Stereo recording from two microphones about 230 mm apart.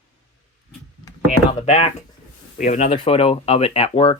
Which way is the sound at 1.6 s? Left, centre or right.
Left.